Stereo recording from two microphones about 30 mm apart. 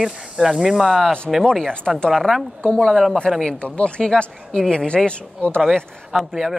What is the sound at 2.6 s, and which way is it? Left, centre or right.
Speech, left.